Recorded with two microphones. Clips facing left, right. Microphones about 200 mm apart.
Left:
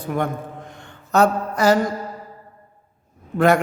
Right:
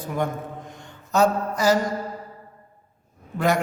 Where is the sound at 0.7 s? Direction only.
60° left (ahead or behind).